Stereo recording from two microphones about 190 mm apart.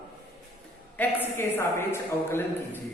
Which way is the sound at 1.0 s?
10° left (ahead or behind).